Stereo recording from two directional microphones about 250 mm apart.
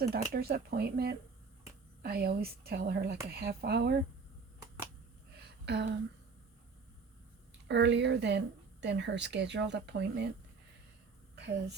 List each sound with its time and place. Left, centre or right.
0.0 s a woman's voice: right
5.5 s a sound: right
7.7 s speech: right
11.3 s a woman's voice: right